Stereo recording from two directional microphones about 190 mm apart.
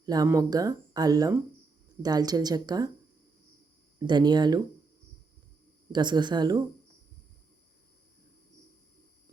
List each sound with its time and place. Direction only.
0.0 s speech: 20° right (ahead or behind)
4.0 s speech: 20° right (ahead or behind)
5.9 s speech: 25° right (ahead or behind)